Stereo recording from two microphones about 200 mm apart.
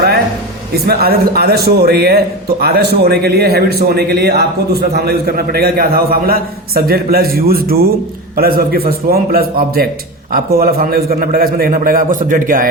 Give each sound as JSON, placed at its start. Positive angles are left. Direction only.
{"t": 0.9, "sound": "a man's voice", "side_deg": -50}